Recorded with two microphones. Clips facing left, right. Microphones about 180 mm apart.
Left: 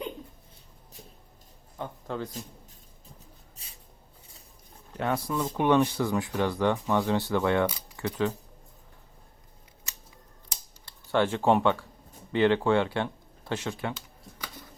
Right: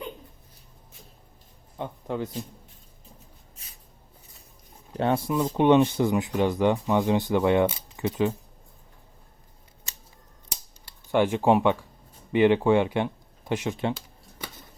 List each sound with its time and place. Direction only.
1.8 s speech: 15° right (ahead or behind)
4.9 s speech: 30° right (ahead or behind)
11.1 s speech: 15° right (ahead or behind)